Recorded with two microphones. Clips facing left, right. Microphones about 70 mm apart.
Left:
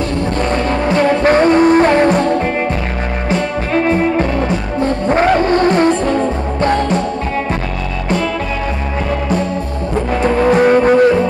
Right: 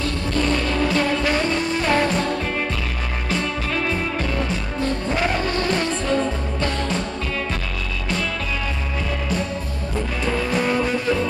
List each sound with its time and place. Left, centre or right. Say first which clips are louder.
0.4 s music: left 3 dB; left
10.2 s music: left 11 dB; left